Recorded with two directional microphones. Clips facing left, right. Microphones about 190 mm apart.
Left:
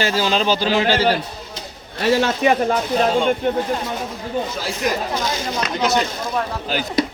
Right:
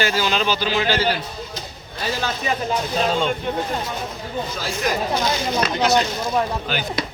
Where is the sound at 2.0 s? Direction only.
75° left (ahead or behind).